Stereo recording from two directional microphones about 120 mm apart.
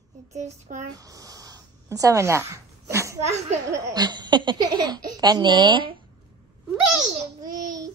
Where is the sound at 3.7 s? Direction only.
30° right (ahead or behind).